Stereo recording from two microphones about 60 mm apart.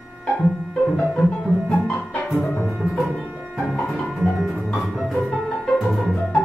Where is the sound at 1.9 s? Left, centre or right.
Left.